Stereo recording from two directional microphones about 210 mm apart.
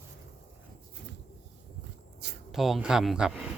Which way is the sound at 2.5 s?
Centre (ahead or behind).